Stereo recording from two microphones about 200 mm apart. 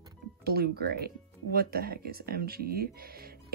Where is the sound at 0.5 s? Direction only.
50° right (ahead or behind).